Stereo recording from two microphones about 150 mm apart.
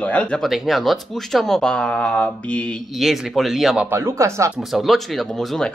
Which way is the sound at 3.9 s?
20° right (ahead or behind).